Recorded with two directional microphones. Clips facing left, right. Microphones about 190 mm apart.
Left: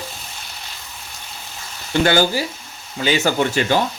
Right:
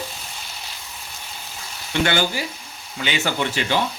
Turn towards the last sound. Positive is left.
turn(degrees=45)  # may be behind; listen again after turning